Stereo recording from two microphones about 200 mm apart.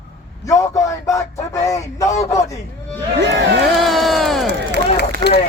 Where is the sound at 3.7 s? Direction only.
Centre (ahead or behind).